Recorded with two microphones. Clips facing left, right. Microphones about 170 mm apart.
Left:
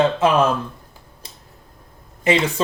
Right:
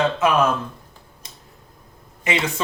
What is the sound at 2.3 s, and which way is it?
Speech, 35° left (ahead or behind).